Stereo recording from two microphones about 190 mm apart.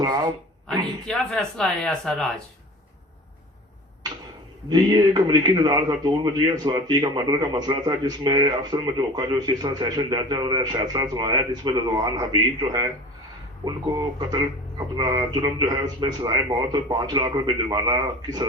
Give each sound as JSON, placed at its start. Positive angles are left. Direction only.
{"t": 0.0, "sound": "speech", "side_deg": -20}
{"t": 1.0, "sound": "speech", "side_deg": 5}
{"t": 4.7, "sound": "a man's voice", "side_deg": -20}